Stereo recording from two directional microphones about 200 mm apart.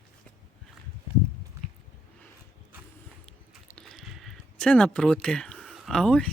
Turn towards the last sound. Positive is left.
turn(degrees=5)  # may be behind; listen again after turning